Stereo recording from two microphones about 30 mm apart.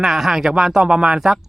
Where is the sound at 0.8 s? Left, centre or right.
Right.